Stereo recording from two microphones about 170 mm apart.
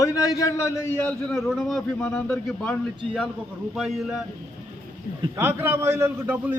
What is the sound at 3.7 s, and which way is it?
Speech, centre (ahead or behind).